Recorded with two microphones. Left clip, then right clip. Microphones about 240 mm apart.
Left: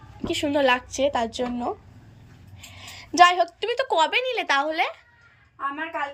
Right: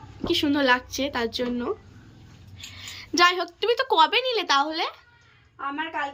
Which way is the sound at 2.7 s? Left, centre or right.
Centre.